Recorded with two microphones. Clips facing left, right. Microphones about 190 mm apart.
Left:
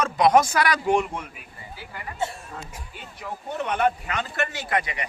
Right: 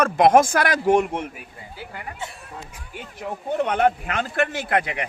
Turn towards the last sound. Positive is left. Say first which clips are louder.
# right 4 dB
turn(degrees=-60)  # may be behind; listen again after turning